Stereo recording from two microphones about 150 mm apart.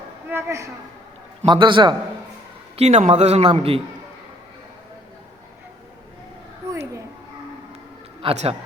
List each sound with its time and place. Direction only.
0.3 s speech: 15° right (ahead or behind)
1.5 s a man's voice: 30° right (ahead or behind)
2.7 s a man's voice: 50° right (ahead or behind)
6.6 s a sound: 20° right (ahead or behind)
8.2 s a man's voice: 45° right (ahead or behind)